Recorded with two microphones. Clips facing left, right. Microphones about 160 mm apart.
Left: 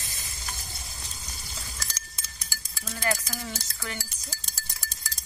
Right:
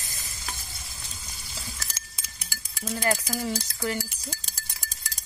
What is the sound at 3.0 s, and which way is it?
Speech, 30° right (ahead or behind).